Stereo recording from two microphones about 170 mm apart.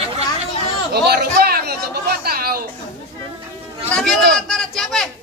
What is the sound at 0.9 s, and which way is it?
Chatter, 70° right (ahead or behind).